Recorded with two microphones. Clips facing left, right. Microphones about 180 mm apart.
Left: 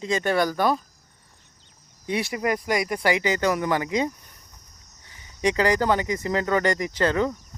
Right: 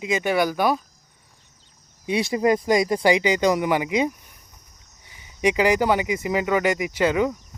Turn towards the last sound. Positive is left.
turn(degrees=-10)  # may be behind; listen again after turning